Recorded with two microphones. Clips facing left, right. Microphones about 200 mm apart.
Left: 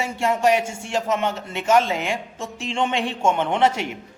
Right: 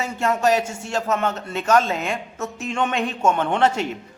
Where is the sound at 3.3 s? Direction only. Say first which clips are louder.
Even; 15° left (ahead or behind).